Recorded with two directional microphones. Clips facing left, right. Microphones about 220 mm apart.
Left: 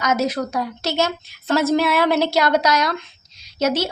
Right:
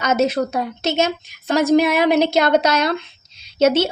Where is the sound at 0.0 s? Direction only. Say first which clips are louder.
Right 3 dB; 25° right (ahead or behind).